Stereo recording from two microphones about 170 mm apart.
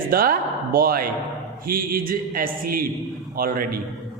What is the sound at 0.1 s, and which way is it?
A man's voice, 60° right (ahead or behind).